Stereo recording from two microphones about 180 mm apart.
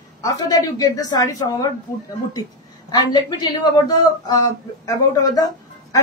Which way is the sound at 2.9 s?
20° left (ahead or behind).